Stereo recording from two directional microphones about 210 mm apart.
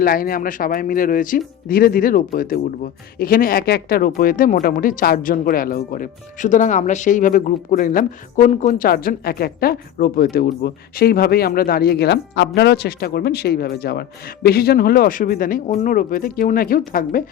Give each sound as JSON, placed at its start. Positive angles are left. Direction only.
{"t": 0.0, "sound": "speech", "side_deg": 45}